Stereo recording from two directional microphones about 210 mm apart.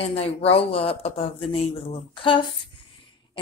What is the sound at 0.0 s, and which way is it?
A woman's voice, 30° left (ahead or behind).